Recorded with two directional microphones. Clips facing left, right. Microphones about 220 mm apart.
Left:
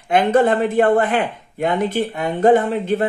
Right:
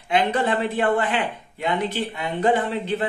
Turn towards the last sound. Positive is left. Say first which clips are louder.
# left 6 dB
turn(degrees=50)  # may be behind; listen again after turning